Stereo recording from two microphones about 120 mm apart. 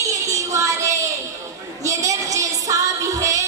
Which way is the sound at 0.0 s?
25° right (ahead or behind).